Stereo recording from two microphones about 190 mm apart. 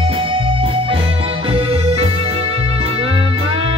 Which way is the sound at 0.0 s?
30° right (ahead or behind).